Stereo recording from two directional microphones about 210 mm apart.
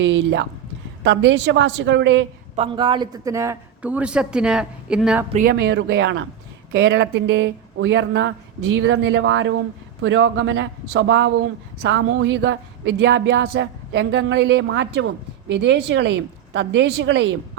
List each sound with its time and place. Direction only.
0.0 s speech: 60° right (ahead or behind)
2.6 s a man's voice: 25° right (ahead or behind); by 5.2 s 5° right (ahead or behind)
5.3 s speech: 40° right (ahead or behind); by 17.6 s 60° right (ahead or behind)